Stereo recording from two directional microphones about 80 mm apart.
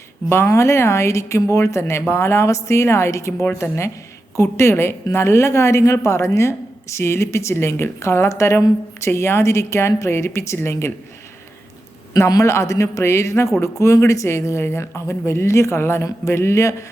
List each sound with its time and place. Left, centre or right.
0.3 s a woman's voice: left
3.4 s speech: left
4.4 s a woman's voice: left
12.3 s a woman's voice: left